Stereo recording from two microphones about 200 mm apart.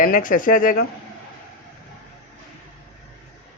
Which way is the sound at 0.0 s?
40° left (ahead or behind).